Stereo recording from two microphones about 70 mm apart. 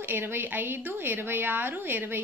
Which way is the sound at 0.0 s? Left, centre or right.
Right.